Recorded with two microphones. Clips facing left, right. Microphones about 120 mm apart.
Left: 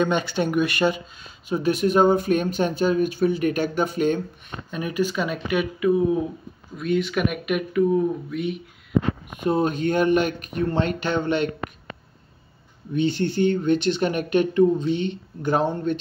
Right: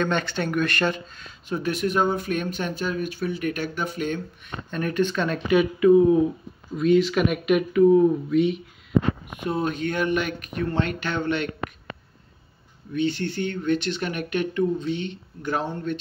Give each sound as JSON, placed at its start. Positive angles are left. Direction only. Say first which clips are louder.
{"t": 0.0, "sound": "speech", "louder": "left 3 dB", "side_deg": 10}
{"t": 1.6, "sound": "speech", "louder": "left 5 dB", "side_deg": 30}
{"t": 4.6, "sound": "speech", "louder": "right 1 dB", "side_deg": 10}
{"t": 9.4, "sound": "speech", "louder": "left 6 dB", "side_deg": 35}
{"t": 12.9, "sound": "speech", "louder": "left 3 dB", "side_deg": 30}